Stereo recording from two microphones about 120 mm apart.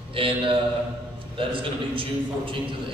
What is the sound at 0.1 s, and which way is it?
A man's voice, 45° right (ahead or behind).